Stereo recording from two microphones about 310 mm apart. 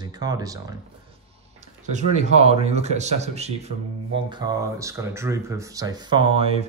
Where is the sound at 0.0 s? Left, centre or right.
Centre.